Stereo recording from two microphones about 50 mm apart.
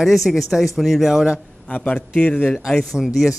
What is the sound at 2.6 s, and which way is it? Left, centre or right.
Speech, centre.